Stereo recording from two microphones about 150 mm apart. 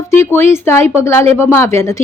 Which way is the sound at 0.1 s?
15° left (ahead or behind).